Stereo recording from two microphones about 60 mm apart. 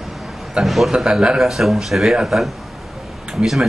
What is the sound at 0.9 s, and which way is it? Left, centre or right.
A man's voice, centre.